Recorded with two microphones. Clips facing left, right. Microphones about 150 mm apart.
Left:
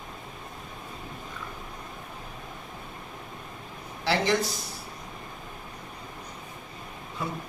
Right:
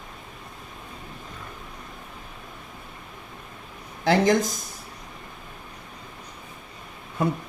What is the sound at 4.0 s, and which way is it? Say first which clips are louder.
Speech: right 6 dB; 50° right (ahead or behind).